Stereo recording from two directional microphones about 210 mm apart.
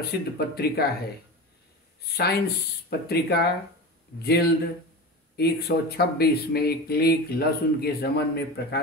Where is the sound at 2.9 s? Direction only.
50° left (ahead or behind).